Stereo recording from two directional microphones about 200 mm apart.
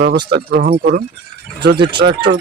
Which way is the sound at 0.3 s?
55° right (ahead or behind).